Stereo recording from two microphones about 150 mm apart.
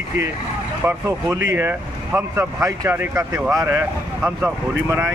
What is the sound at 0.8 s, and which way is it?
Speech, 20° right (ahead or behind).